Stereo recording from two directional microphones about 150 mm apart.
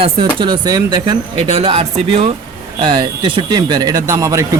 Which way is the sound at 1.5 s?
45° right (ahead or behind).